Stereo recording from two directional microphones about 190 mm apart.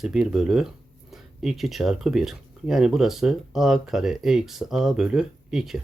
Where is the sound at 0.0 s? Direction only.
5° right (ahead or behind).